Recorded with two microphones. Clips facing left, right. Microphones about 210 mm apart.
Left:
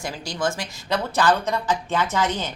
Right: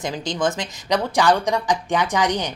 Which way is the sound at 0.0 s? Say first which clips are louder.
Right 4 dB; 20° right (ahead or behind).